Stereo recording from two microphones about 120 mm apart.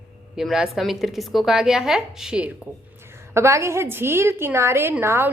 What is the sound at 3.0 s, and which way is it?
A woman's voice, 20° right (ahead or behind).